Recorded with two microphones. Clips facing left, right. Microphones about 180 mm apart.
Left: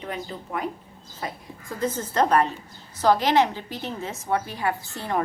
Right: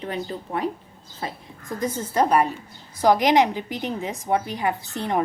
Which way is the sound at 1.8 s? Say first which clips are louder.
Right 1 dB; 10° right (ahead or behind).